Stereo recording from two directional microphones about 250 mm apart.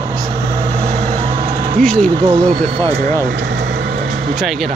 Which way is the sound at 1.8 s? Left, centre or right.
Centre.